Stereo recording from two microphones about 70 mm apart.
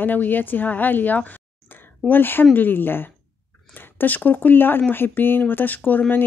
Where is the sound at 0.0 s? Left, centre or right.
Left.